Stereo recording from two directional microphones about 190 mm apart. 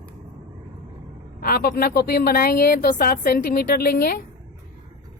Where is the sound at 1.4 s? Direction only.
50° left (ahead or behind).